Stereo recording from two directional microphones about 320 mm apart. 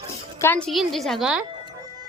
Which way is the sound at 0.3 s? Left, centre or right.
Centre.